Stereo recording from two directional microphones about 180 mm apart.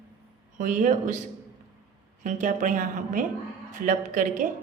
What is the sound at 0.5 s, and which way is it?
Speech, 45° right (ahead or behind).